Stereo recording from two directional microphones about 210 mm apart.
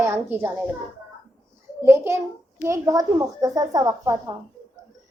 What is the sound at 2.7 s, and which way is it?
A woman's voice, 15° right (ahead or behind).